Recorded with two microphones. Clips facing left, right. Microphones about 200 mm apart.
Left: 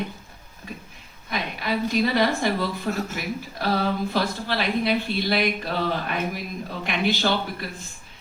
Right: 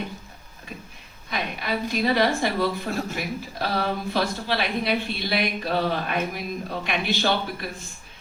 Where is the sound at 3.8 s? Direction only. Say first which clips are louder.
Left 1 dB; 55° right (ahead or behind).